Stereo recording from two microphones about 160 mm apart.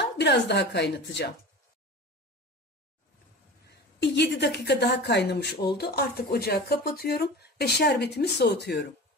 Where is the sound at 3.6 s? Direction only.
90° left.